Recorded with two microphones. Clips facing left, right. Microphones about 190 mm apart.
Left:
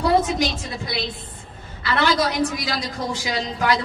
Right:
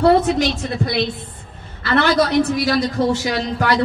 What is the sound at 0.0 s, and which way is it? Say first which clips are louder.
A woman's voice: right 5 dB; 60° right (ahead or behind).